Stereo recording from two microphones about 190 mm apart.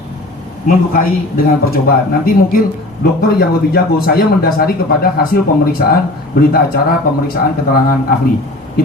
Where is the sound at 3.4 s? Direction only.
55° left (ahead or behind).